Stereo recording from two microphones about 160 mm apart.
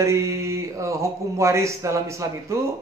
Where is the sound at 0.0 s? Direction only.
20° right (ahead or behind).